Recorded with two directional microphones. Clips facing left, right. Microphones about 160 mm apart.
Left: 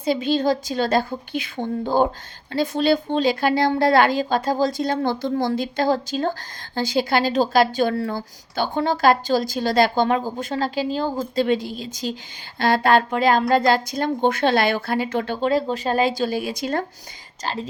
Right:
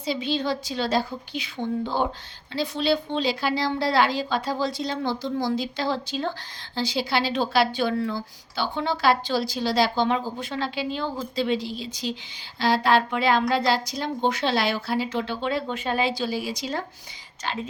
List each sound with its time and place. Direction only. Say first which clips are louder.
0.0 s speech: left 6 dB; 50° left (ahead or behind)
17.4 s speech: left 3 dB; 40° left (ahead or behind)